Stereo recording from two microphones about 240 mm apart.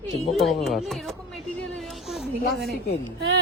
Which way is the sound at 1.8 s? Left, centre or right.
Centre.